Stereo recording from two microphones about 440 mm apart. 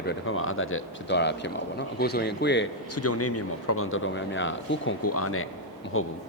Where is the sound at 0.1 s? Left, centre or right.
Left.